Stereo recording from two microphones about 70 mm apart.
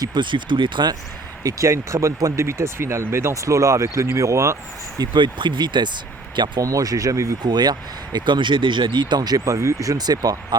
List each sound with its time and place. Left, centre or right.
0.0 s speech: right
1.5 s speech: right
4.9 s speech: right
6.6 s speech: right
7.5 s speech: right
9.0 s speech: right
9.4 s speech: right
10.0 s speech: right